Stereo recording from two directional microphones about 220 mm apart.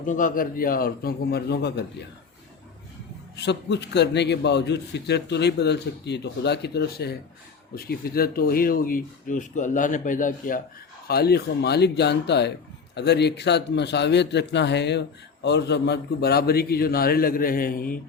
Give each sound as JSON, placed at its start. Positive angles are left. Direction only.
{"t": 0.0, "sound": "speech", "side_deg": 35}
{"t": 3.3, "sound": "speech", "side_deg": 50}